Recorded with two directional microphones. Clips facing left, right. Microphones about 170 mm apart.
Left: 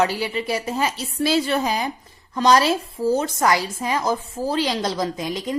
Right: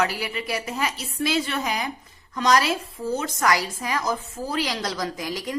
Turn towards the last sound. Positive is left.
turn(degrees=20)  # may be behind; listen again after turning